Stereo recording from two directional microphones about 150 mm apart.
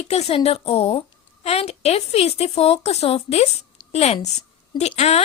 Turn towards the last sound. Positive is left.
turn(degrees=45)  # may be behind; listen again after turning